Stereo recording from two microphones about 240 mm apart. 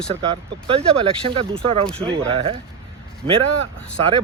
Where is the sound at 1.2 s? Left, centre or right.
Right.